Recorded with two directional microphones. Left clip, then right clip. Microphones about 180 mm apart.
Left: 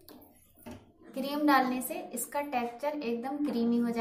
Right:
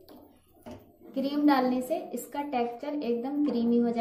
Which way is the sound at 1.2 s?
50° left (ahead or behind).